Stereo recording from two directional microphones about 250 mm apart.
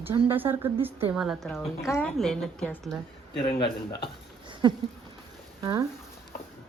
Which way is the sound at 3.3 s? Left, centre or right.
Centre.